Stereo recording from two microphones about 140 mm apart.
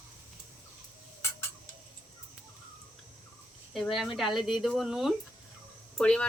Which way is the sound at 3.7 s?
Centre (ahead or behind).